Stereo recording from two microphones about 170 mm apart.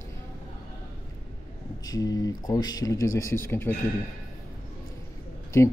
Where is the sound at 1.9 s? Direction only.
20° left (ahead or behind).